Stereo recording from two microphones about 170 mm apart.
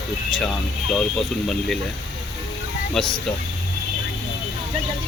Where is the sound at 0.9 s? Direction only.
5° left (ahead or behind).